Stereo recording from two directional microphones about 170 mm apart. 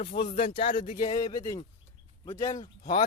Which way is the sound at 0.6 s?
30° left (ahead or behind).